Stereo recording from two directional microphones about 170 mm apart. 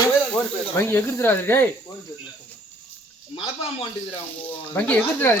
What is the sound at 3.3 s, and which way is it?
Speech, 35° left (ahead or behind).